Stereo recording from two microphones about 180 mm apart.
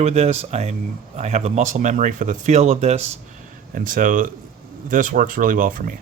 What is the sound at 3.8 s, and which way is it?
Speech, 50° right (ahead or behind).